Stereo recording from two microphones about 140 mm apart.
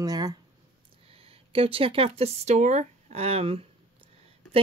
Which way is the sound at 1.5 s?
40° right (ahead or behind).